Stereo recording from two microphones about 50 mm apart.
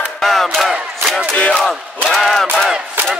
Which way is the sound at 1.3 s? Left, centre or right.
Left.